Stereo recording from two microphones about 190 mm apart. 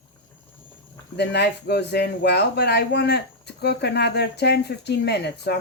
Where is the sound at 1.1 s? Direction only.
60° left (ahead or behind).